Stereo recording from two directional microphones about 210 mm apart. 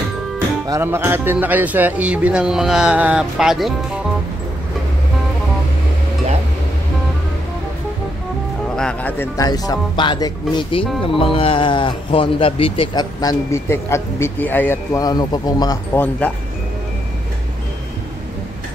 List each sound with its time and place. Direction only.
0.7 s speech: 10° right (ahead or behind)
8.7 s speech: 5° left (ahead or behind)